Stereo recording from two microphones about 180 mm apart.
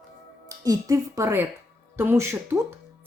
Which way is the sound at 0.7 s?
15° right (ahead or behind).